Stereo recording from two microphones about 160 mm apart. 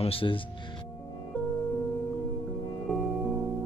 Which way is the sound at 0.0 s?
35° left (ahead or behind).